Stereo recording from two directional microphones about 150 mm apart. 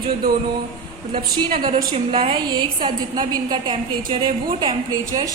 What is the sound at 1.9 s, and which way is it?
A woman's voice, 35° right (ahead or behind).